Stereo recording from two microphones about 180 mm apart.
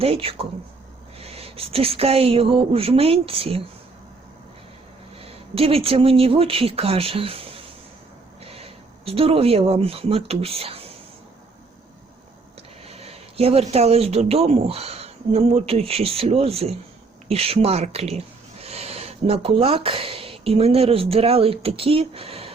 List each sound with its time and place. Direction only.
0.0 s a woman's voice: 30° right (ahead or behind)
5.1 s speech: 35° right (ahead or behind)
12.8 s a woman's voice: 35° right (ahead or behind)